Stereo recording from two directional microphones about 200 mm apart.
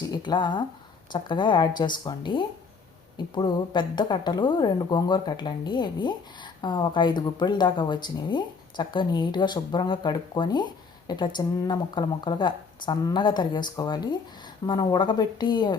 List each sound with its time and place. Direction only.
0.0 s a woman's voice: 20° left (ahead or behind)